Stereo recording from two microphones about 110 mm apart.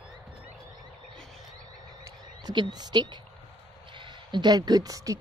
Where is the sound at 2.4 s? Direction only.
40° right (ahead or behind).